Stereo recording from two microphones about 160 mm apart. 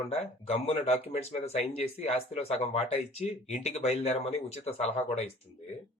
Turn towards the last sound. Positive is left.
turn(degrees=45)  # may be behind; listen again after turning